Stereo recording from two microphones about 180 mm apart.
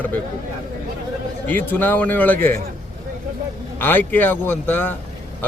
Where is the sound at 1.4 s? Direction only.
10° left (ahead or behind).